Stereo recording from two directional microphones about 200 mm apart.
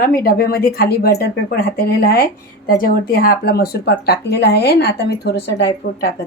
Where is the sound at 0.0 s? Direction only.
45° left (ahead or behind).